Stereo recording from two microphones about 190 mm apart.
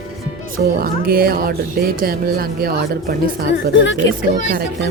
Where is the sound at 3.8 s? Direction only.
80° left.